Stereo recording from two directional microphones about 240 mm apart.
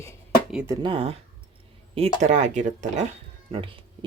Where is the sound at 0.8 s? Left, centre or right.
Right.